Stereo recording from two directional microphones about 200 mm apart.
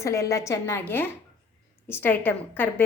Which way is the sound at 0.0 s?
15° left (ahead or behind).